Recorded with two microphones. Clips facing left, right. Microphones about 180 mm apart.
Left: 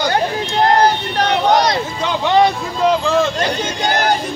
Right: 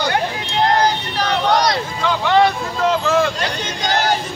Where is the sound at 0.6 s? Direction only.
55° left (ahead or behind).